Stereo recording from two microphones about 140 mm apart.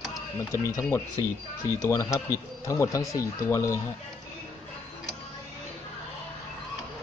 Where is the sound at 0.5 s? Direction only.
20° left (ahead or behind).